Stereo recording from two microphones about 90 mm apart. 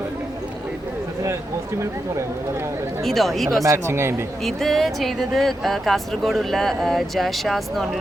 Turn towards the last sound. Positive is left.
turn(degrees=0)  # may be behind; listen again after turning